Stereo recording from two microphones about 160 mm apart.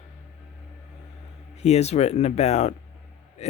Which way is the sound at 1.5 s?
40° left (ahead or behind).